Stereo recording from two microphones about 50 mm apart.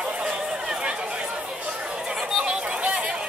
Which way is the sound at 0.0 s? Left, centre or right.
Centre.